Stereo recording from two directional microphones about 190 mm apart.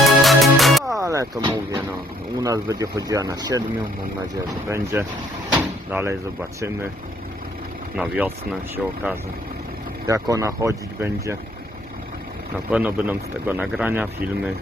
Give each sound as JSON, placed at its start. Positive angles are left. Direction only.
{"t": 0.2, "sound": "music", "side_deg": 0}
{"t": 0.9, "sound": "a man's voice", "side_deg": -15}
{"t": 4.7, "sound": "a man's voice", "side_deg": -15}
{"t": 5.5, "sound": "door", "side_deg": -10}
{"t": 7.9, "sound": "a man's voice", "side_deg": -5}
{"t": 10.1, "sound": "a man's voice", "side_deg": -15}
{"t": 12.7, "sound": "a man's voice", "side_deg": -10}